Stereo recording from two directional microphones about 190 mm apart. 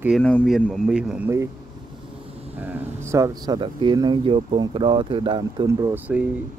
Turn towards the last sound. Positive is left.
turn(degrees=-10)  # may be behind; listen again after turning